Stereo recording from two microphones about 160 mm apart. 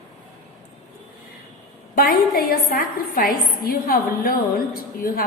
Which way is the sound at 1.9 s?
65° left (ahead or behind).